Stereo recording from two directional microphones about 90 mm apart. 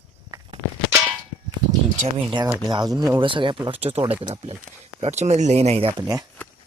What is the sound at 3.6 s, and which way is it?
Speech, 90° right.